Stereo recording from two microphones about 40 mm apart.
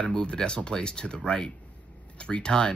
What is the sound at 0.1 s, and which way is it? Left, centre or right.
Speech, left.